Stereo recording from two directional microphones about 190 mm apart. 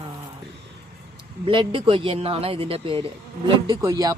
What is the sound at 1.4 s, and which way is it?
A woman's voice, 25° right (ahead or behind).